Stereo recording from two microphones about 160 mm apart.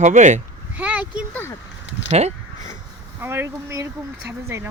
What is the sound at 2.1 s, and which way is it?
Speech, 45° right (ahead or behind).